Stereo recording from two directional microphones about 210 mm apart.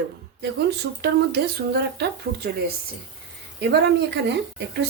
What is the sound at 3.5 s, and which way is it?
Speech, 50° right (ahead or behind).